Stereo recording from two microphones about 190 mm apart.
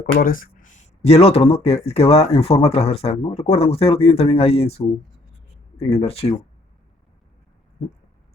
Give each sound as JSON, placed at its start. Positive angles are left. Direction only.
{"t": 0.0, "sound": "speech", "side_deg": 50}